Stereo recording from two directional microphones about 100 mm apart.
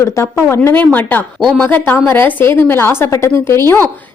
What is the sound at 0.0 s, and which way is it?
A woman's voice, 25° left (ahead or behind).